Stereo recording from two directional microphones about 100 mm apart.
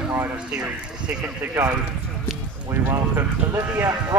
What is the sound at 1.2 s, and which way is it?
Speech, 25° right (ahead or behind).